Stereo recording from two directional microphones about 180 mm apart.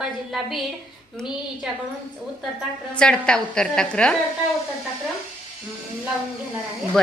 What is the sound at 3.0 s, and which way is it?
A woman's voice, 5° left (ahead or behind).